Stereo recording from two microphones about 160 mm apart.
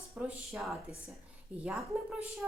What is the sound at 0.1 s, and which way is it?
Speech, centre (ahead or behind).